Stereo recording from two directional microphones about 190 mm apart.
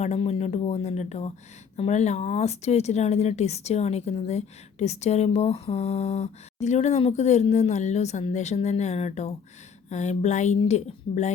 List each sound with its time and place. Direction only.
0.0 s speech: 35° left (ahead or behind)